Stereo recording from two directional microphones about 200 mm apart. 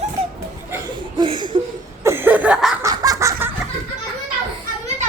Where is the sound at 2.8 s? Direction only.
20° right (ahead or behind).